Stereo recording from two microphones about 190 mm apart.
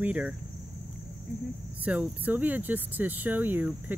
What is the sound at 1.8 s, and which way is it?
Speech, 5° right (ahead or behind).